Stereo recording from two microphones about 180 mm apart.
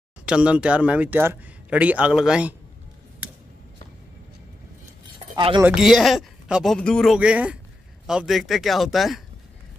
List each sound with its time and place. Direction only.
0.2 s speech: 5° right (ahead or behind)
5.3 s speech: 25° right (ahead or behind)
5.6 s a man's voice: 5° right (ahead or behind)